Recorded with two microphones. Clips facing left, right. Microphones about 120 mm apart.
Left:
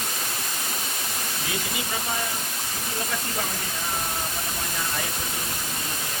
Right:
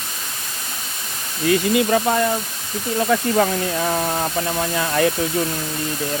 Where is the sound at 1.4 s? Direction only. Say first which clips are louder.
Right 18 dB; 65° right (ahead or behind).